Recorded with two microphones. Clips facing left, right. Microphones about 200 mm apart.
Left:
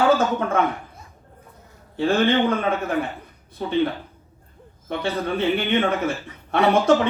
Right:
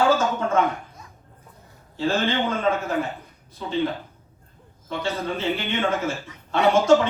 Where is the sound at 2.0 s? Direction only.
60° left (ahead or behind).